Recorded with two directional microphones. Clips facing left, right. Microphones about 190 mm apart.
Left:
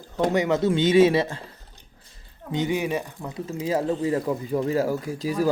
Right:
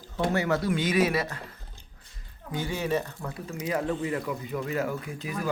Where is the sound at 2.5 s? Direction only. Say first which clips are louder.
Left 4 dB; 20° left (ahead or behind).